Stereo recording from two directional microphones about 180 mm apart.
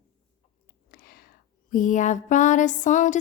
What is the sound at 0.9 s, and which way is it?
Whispering, 55° left (ahead or behind).